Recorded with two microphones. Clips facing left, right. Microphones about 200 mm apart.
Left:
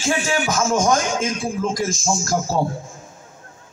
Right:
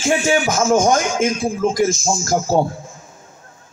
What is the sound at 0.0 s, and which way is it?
Speech, 25° right (ahead or behind).